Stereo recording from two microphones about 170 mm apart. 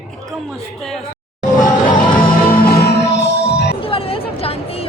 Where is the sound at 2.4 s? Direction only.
60° left (ahead or behind).